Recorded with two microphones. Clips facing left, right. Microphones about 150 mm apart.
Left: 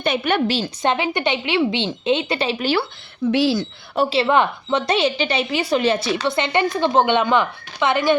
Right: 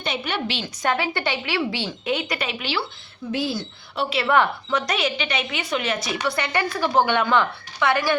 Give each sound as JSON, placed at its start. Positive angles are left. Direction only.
{"t": 0.0, "sound": "a woman's voice", "side_deg": 55}
{"t": 0.8, "sound": "a woman's voice", "side_deg": 20}
{"t": 3.3, "sound": "a woman's voice", "side_deg": 90}
{"t": 4.1, "sound": "a woman's voice", "side_deg": 25}